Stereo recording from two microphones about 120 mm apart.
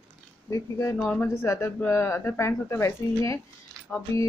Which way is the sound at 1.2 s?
25° left (ahead or behind).